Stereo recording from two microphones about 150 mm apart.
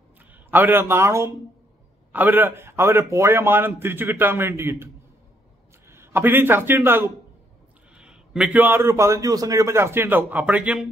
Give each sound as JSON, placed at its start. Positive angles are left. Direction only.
{"t": 0.2, "sound": "a man's voice", "side_deg": -10}
{"t": 5.9, "sound": "a man's voice", "side_deg": -15}
{"t": 7.9, "sound": "a man's voice", "side_deg": -5}